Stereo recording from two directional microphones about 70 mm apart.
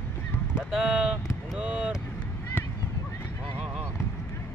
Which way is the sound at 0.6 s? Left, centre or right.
Centre.